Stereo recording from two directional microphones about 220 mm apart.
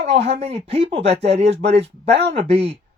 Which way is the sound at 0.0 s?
30° right (ahead or behind).